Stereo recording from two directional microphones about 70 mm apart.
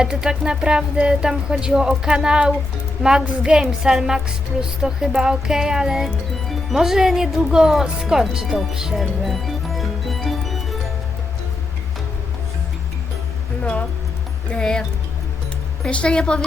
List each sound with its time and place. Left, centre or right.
0.0 s speech: centre
13.6 s music: centre
14.5 s speech: centre
15.9 s a woman's voice: centre